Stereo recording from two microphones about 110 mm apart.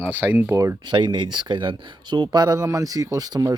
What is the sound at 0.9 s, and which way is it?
Speech, 45° right (ahead or behind).